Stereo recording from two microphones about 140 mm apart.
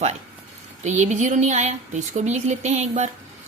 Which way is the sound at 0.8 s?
60° right (ahead or behind).